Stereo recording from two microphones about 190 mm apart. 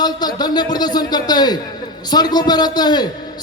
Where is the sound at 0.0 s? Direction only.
20° left (ahead or behind).